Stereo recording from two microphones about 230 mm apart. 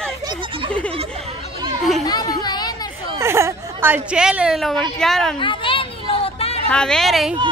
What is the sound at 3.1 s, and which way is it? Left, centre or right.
A woman's voice, centre.